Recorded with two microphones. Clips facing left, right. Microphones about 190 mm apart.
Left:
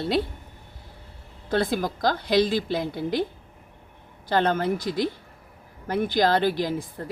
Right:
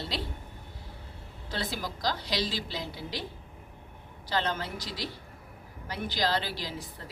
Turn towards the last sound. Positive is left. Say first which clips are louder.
# left 11 dB
turn(degrees=55)  # may be behind; listen again after turning